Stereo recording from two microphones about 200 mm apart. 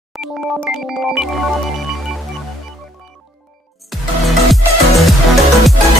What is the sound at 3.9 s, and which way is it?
Music, centre (ahead or behind).